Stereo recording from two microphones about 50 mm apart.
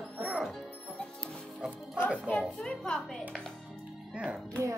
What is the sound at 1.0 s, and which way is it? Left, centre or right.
Music, centre.